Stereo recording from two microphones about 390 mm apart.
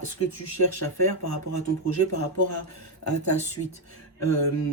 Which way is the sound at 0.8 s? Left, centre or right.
Left.